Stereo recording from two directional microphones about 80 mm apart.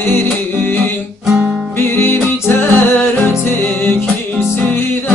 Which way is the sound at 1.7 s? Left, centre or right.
Left.